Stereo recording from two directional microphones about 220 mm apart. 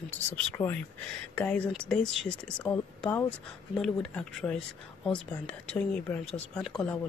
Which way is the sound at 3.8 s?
5° left (ahead or behind).